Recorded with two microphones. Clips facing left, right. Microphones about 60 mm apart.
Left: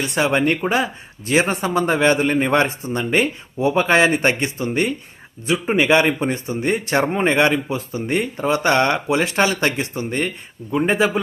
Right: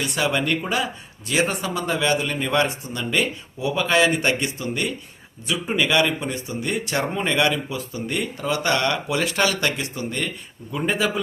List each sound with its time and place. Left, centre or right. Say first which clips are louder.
0.0 s speech: left 5 dB; left